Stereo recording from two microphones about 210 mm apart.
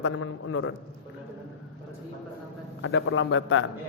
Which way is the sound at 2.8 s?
65° left (ahead or behind).